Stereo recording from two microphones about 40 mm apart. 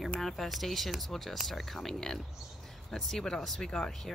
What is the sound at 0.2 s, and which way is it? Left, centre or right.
Speech, centre.